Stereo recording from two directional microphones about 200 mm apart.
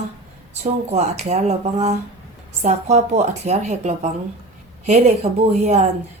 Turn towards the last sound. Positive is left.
turn(degrees=-35)  # may be behind; listen again after turning